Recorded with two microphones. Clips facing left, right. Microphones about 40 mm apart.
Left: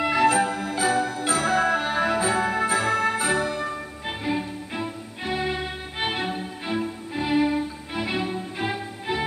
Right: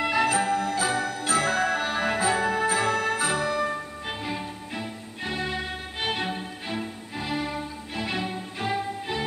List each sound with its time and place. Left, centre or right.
0.0 s music: centre
0.5 s music: centre
1.3 s music: centre
2.7 s music: centre
6.3 s music: centre
7.2 s music: centre